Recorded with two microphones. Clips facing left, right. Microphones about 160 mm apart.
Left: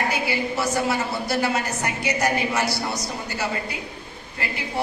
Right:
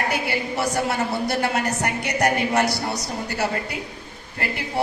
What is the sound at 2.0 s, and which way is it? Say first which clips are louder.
Speech: right 1 dB; 60° right (ahead or behind).